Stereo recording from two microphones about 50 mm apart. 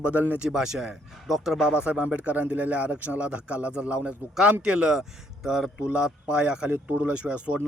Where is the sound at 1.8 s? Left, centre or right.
Right; by 5.8 s centre.